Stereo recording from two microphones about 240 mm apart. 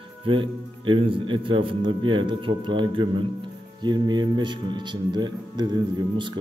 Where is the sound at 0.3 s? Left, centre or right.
Right.